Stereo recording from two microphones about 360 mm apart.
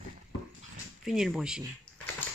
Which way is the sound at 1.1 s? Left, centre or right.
Centre.